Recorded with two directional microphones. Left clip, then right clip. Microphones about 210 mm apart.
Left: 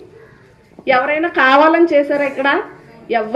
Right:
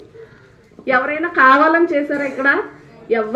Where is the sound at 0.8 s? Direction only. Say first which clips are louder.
Left 3 dB; 25° left (ahead or behind).